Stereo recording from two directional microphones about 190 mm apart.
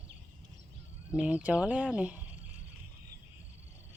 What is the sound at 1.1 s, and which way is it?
Speech, 5° right (ahead or behind).